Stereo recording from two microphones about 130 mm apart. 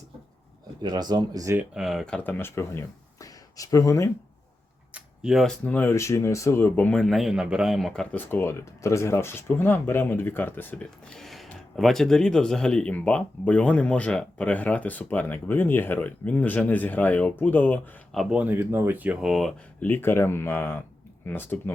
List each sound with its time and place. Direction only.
0.8 s speech: 35° right (ahead or behind)
1.7 s speech: centre (ahead or behind)
2.4 s speech: 20° left (ahead or behind)
4.9 s a sound: 5° right (ahead or behind)
5.6 s speech: 15° left (ahead or behind)
8.1 s speech: 15° left (ahead or behind)
18.1 s speech: centre (ahead or behind)
18.3 s speech: 15° right (ahead or behind); by 19.5 s centre (ahead or behind)
19.8 s speech: 15° left (ahead or behind)